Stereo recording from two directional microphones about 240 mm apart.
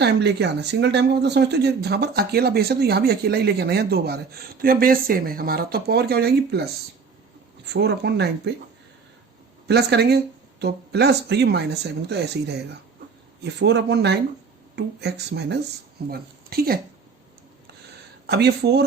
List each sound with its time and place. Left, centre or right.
0.0 s speech: right
7.7 s speech: right
9.6 s a woman's voice: right
18.3 s speech: right